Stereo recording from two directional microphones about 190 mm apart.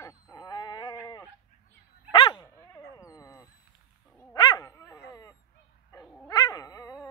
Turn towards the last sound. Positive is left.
turn(degrees=20)  # may be behind; listen again after turning